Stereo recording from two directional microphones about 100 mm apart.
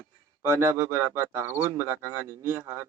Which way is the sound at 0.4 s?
25° right (ahead or behind).